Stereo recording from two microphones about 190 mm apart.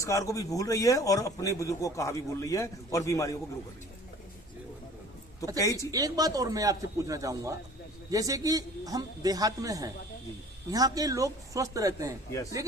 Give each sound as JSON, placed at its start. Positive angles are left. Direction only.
{"t": 0.0, "sound": "speech", "side_deg": 15}
{"t": 5.5, "sound": "speech", "side_deg": 15}
{"t": 5.9, "sound": "a man's voice", "side_deg": -20}